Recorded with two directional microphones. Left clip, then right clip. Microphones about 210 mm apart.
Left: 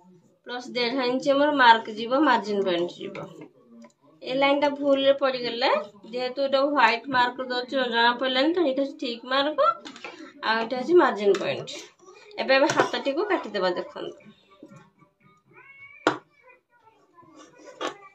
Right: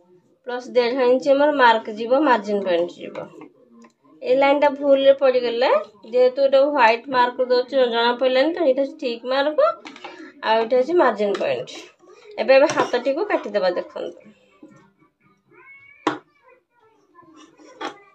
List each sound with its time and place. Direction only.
0.5 s a woman's voice: 20° right (ahead or behind)
4.2 s a woman's voice: 30° right (ahead or behind)